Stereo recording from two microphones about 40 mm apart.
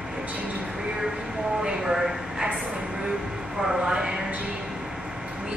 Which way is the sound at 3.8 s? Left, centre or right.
Centre.